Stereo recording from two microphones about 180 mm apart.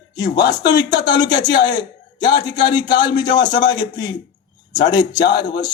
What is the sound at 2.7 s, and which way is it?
A man's voice, 25° left (ahead or behind).